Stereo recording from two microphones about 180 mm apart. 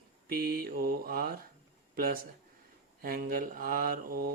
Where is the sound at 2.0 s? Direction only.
55° right (ahead or behind).